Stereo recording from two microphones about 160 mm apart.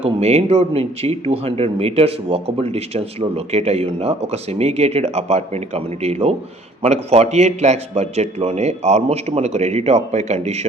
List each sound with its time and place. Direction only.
0.0 s a man's voice: 40° right (ahead or behind)